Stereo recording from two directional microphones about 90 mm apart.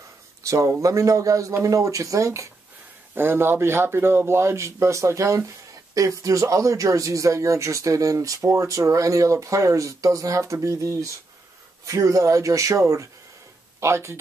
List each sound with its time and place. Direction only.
0.5 s speech: 35° right (ahead or behind)
3.2 s speech: 25° right (ahead or behind)